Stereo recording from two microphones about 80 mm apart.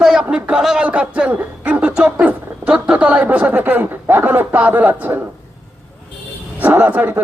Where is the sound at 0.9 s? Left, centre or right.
Centre.